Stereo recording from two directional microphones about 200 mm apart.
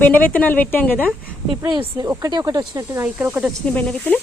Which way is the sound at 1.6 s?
25° right (ahead or behind).